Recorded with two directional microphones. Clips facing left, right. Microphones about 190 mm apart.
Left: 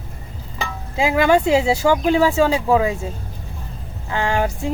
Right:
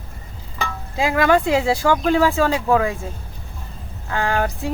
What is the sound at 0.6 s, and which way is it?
Speech, 10° left (ahead or behind).